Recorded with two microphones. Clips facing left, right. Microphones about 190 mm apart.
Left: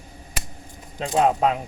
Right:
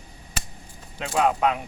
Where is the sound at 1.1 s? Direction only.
30° left (ahead or behind).